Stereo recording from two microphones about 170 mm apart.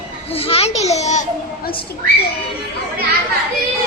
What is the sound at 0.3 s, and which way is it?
Speech, 35° left (ahead or behind).